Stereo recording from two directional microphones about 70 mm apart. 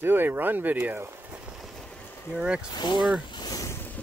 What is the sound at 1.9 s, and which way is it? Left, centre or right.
Boat, left.